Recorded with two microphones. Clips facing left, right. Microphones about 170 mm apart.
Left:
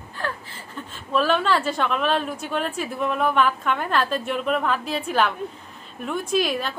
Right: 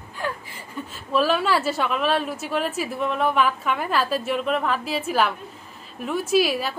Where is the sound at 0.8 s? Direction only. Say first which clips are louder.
Right 1 dB; 5° right (ahead or behind).